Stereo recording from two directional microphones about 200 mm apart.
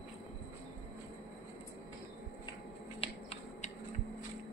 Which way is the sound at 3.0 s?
30° left (ahead or behind).